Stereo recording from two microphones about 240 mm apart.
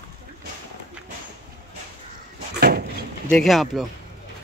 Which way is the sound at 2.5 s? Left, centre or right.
Right.